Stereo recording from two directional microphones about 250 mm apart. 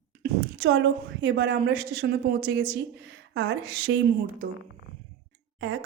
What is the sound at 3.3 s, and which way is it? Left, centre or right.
Speech, right.